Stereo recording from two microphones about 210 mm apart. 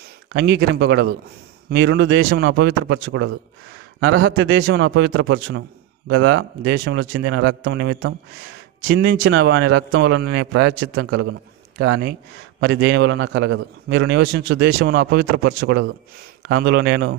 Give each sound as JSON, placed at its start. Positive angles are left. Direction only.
{"t": 0.3, "sound": "a man's voice", "side_deg": -55}